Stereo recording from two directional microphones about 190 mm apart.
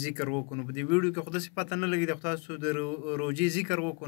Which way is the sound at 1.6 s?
25° right (ahead or behind).